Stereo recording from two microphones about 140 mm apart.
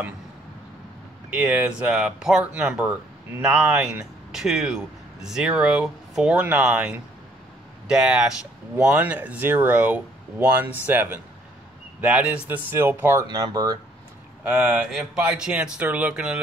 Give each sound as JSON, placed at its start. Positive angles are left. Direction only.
{"t": 1.3, "sound": "speech", "side_deg": -10}
{"t": 13.3, "sound": "speech", "side_deg": -30}
{"t": 14.4, "sound": "speech", "side_deg": -10}